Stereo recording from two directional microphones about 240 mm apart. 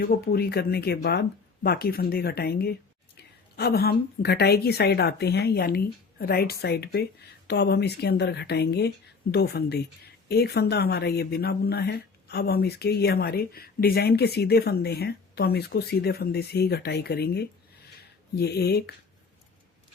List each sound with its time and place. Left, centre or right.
0.0 s speech: left